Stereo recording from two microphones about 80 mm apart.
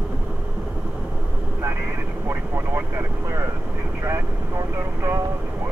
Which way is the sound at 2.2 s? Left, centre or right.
Right.